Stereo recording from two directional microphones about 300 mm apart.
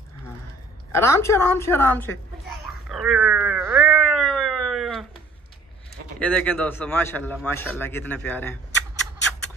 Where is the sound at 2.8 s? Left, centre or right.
Centre.